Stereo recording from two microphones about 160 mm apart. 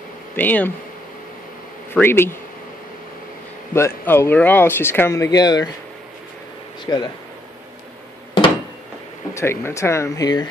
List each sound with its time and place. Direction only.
0.4 s speech: 10° left (ahead or behind)
2.0 s speech: 15° left (ahead or behind)
3.7 s speech: 15° left (ahead or behind)
6.9 s speech: 20° left (ahead or behind)
9.3 s speech: 15° left (ahead or behind)